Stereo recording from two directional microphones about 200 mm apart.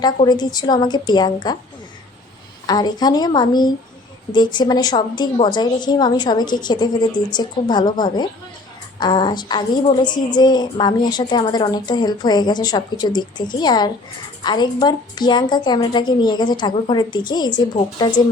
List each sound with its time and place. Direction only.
0.0 s a woman's voice: 20° left (ahead or behind)
2.6 s a woman's voice: 20° left (ahead or behind)